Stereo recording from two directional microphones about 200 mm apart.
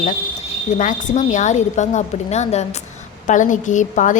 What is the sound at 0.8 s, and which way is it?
A woman's voice, 40° left (ahead or behind).